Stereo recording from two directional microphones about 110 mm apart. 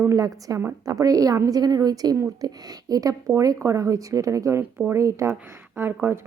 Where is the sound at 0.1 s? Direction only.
35° right (ahead or behind).